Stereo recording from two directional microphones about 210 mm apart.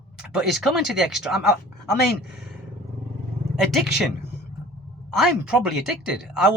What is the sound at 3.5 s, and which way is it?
Speech, centre (ahead or behind).